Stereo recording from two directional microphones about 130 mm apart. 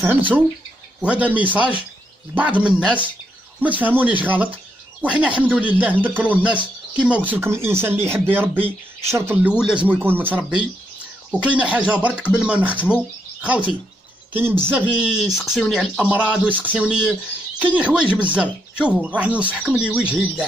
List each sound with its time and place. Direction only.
1.0 s speech: 10° right (ahead or behind)